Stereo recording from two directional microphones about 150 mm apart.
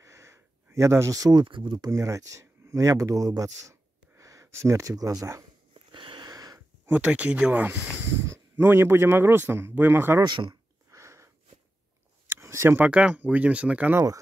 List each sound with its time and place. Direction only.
0.0 s a sound: 20° right (ahead or behind)
1.9 s speech: 20° right (ahead or behind)
5.9 s sniff: 35° right (ahead or behind)
6.9 s speech: 10° right (ahead or behind)
10.2 s a sound: 30° right (ahead or behind)
12.3 s speech: 20° right (ahead or behind)